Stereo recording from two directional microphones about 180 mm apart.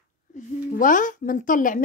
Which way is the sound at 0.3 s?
45° left (ahead or behind).